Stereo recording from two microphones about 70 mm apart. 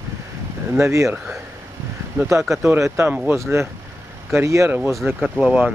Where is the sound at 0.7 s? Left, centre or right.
Right.